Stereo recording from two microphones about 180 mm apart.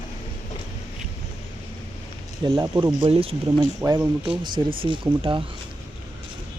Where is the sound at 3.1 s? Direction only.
30° right (ahead or behind).